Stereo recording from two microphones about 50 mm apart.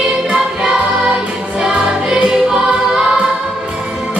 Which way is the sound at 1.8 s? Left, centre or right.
Centre.